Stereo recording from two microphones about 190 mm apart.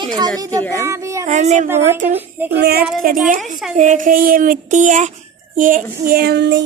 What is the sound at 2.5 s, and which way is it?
Child singing, 55° right (ahead or behind).